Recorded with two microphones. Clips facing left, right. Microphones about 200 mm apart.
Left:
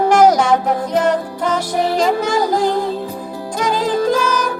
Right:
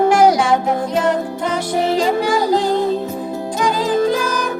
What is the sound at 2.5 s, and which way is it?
Music, 25° right (ahead or behind).